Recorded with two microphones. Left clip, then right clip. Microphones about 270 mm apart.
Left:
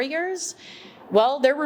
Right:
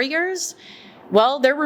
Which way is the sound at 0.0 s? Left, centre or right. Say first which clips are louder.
Right 4 dB; centre.